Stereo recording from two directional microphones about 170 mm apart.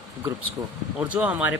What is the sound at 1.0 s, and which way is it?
Speech, 10° right (ahead or behind).